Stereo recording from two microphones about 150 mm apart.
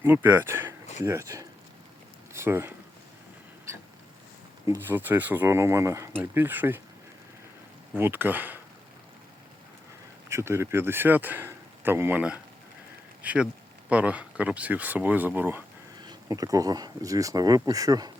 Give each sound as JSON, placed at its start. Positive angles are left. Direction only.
{"t": 0.0, "sound": "speech", "side_deg": -15}
{"t": 4.6, "sound": "speech", "side_deg": -15}
{"t": 7.9, "sound": "speech", "side_deg": -15}
{"t": 10.2, "sound": "speech", "side_deg": -20}
{"t": 16.0, "sound": "speech", "side_deg": -25}